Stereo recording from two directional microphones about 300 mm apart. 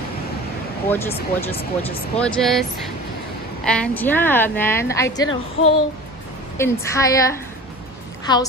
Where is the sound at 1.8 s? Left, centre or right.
Centre.